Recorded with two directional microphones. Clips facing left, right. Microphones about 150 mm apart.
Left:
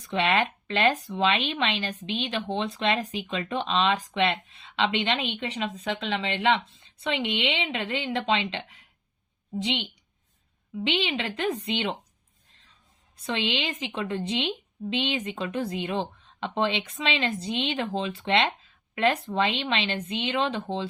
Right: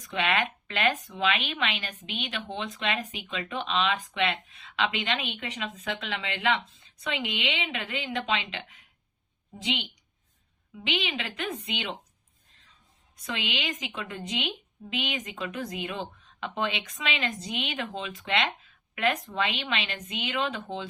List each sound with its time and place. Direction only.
0.0 s a woman's voice: 35° left (ahead or behind)
13.2 s a woman's voice: 30° left (ahead or behind)